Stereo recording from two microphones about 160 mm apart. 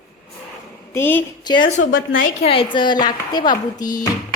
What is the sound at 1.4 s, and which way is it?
Speech, 30° left (ahead or behind).